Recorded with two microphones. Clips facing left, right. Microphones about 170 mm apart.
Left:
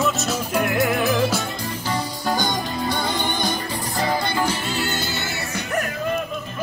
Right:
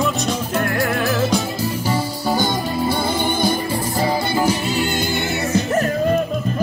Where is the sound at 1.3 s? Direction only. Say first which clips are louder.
Right 5 dB; 5° right (ahead or behind).